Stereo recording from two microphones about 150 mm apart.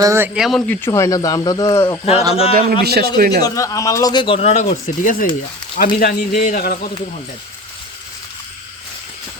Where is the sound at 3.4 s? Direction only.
25° left (ahead or behind); by 5.2 s 60° left (ahead or behind).